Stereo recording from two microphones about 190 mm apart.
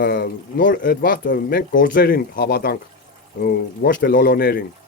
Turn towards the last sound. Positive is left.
turn(degrees=55)  # may be behind; listen again after turning